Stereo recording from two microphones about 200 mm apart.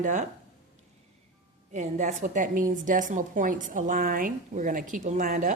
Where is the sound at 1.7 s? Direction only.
35° right (ahead or behind).